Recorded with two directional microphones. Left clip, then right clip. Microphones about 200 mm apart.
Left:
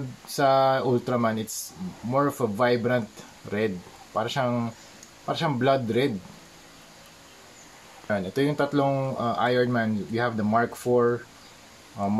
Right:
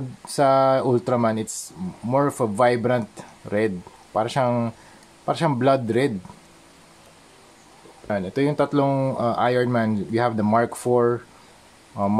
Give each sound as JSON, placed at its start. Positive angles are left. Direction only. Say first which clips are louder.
{"t": 0.4, "sound": "speech", "louder": "right 3 dB", "side_deg": -35}
{"t": 8.1, "sound": "speech", "louder": "right 2 dB", "side_deg": -30}